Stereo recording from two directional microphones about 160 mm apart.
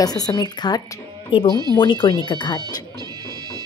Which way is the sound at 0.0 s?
25° left (ahead or behind).